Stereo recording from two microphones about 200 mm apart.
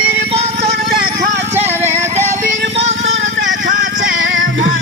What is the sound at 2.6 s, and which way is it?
Vehicle, 60° right (ahead or behind).